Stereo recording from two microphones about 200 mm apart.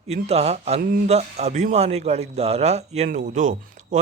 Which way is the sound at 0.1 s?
30° right (ahead or behind).